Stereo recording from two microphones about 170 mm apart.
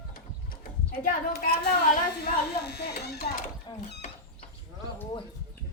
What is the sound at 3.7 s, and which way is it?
Speech, 25° left (ahead or behind).